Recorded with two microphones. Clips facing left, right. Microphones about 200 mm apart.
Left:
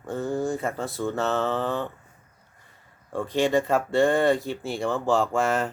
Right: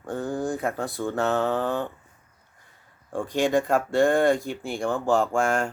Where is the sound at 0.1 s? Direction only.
15° right (ahead or behind).